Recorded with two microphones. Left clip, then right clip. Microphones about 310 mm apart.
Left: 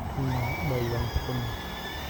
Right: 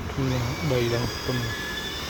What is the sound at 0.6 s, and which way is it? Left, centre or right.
Speech, centre.